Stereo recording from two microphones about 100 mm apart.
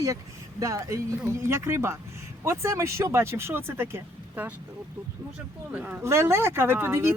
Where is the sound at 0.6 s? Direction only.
30° right (ahead or behind).